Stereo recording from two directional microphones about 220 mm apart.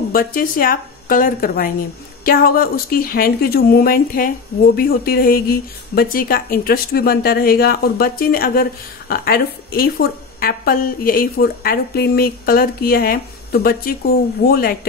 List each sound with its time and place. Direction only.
0.1 s a woman's voice: 40° left (ahead or behind)